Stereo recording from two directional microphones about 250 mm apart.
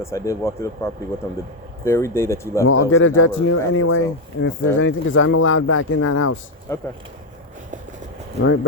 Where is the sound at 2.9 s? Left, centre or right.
Left.